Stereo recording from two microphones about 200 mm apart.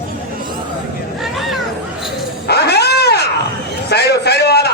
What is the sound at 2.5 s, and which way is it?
Cat, 55° left (ahead or behind).